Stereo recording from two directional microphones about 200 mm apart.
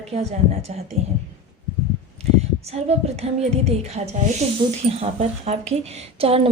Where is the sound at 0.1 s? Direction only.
35° right (ahead or behind).